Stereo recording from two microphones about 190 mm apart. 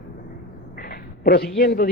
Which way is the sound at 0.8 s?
50° left (ahead or behind).